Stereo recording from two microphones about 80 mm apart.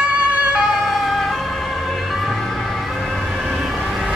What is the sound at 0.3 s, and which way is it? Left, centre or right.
Ambulance, centre.